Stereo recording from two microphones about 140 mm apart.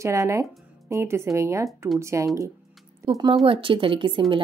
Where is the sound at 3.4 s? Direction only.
40° right (ahead or behind).